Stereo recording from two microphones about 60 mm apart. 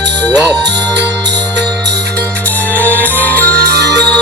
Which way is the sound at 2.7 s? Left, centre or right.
Left.